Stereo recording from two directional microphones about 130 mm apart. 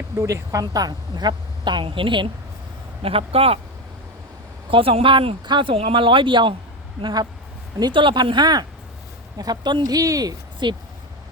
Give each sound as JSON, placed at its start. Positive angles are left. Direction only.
{"t": 0.2, "sound": "a woman's voice", "side_deg": -20}
{"t": 4.7, "sound": "a woman's voice", "side_deg": -45}